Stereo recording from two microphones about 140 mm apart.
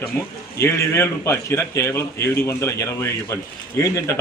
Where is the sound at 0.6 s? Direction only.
20° left (ahead or behind).